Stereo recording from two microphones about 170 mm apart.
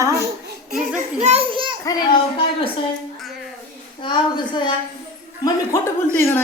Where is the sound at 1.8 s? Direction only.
25° left (ahead or behind).